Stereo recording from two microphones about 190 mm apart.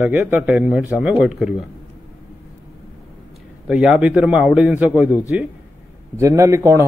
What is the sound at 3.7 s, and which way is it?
A man's voice, 5° right (ahead or behind).